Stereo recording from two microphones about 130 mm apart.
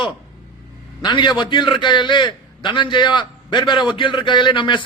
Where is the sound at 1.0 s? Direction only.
35° left (ahead or behind).